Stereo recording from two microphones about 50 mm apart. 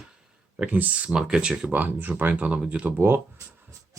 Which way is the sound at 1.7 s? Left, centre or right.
Right.